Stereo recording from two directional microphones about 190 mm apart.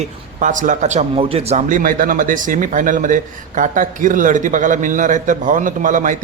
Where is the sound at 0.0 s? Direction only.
40° right (ahead or behind).